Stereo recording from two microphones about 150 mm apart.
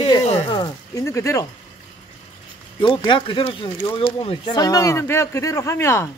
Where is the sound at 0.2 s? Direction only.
35° left (ahead or behind).